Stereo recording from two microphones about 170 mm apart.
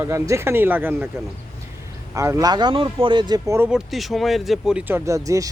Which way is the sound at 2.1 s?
20° right (ahead or behind).